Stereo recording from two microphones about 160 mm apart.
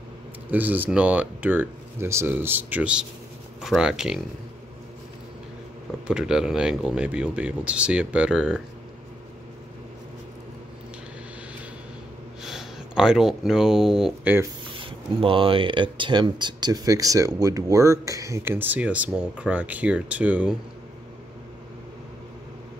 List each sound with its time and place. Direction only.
0.5 s speech: 10° right (ahead or behind)
6.0 s speech: 5° right (ahead or behind)
12.4 s speech: 5° right (ahead or behind)
14.8 s speech: 35° right (ahead or behind); by 20.5 s 10° right (ahead or behind)